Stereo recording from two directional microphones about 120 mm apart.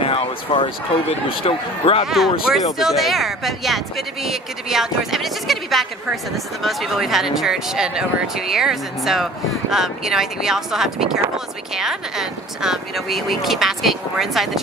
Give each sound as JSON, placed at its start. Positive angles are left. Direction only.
{"t": 0.0, "sound": "a sound", "side_deg": 50}
{"t": 1.4, "sound": "speech", "side_deg": 50}
{"t": 2.0, "sound": "speech", "side_deg": 0}